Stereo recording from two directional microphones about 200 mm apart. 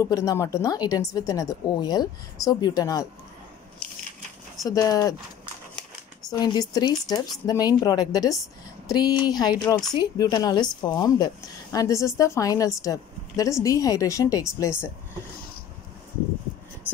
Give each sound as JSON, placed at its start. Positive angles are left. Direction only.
{"t": 0.0, "sound": "a woman's voice", "side_deg": 15}
{"t": 4.6, "sound": "a woman's voice", "side_deg": 20}
{"t": 6.3, "sound": "a woman's voice", "side_deg": 20}